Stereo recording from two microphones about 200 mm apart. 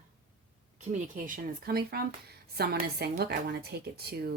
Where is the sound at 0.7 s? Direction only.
40° right (ahead or behind).